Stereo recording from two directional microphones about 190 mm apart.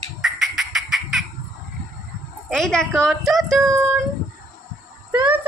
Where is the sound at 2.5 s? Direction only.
Centre (ahead or behind).